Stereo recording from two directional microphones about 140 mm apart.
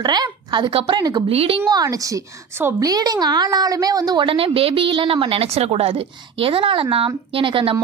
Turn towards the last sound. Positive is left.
turn(degrees=-40)  # may be behind; listen again after turning